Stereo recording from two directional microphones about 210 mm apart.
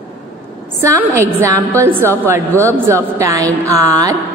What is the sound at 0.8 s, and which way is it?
A woman's voice, 15° right (ahead or behind).